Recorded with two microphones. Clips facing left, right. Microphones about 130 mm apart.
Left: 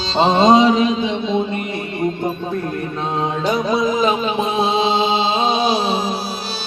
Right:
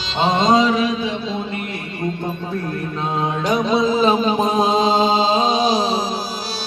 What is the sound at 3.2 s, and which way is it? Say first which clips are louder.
Music: even; 15° right (ahead or behind).